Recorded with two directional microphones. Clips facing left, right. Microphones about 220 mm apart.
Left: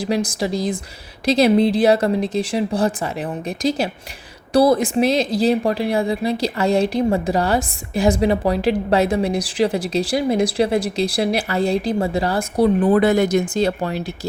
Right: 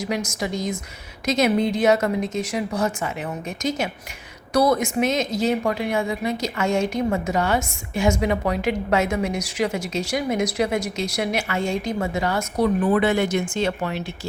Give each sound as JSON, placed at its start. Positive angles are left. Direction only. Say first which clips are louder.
{"t": 0.0, "sound": "a woman's voice", "louder": "left 5 dB", "side_deg": 30}